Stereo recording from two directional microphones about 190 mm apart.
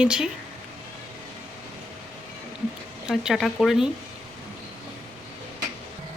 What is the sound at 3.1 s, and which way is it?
Speech, centre (ahead or behind).